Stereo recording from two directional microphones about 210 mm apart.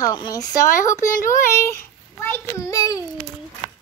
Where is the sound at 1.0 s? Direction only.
40° left (ahead or behind).